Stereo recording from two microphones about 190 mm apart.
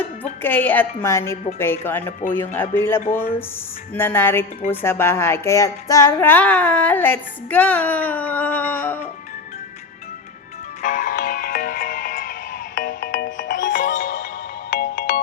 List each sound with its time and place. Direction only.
0.4 s speech: 10° left (ahead or behind)
10.8 s music: 45° left (ahead or behind)
13.0 s music: 70° left (ahead or behind)
13.3 s music: 45° left (ahead or behind)
14.7 s ringtone: 60° left (ahead or behind)